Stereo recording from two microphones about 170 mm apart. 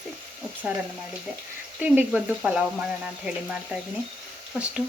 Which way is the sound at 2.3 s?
Centre (ahead or behind).